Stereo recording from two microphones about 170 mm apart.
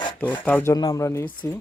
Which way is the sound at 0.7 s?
20° left (ahead or behind).